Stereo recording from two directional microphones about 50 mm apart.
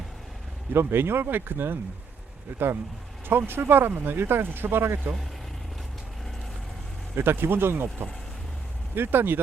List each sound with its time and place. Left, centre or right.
0.7 s speech: right
7.2 s speech: right